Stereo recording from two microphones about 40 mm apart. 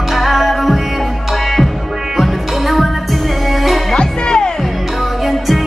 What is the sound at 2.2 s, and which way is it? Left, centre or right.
Music, centre.